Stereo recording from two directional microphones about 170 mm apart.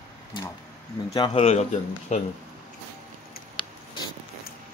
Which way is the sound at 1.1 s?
25° left (ahead or behind).